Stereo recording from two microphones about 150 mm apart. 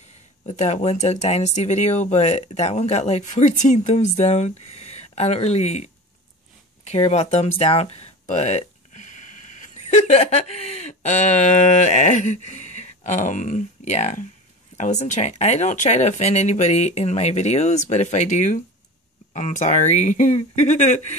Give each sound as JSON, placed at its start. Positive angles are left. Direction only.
{"t": 0.5, "sound": "speech", "side_deg": 50}